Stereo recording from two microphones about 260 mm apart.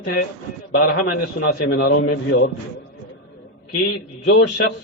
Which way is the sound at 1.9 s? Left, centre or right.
Left.